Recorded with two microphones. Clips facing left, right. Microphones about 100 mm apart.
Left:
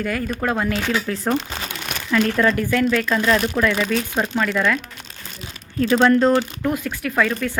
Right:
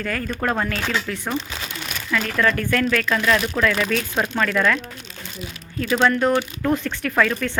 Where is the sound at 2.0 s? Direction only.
25° left (ahead or behind).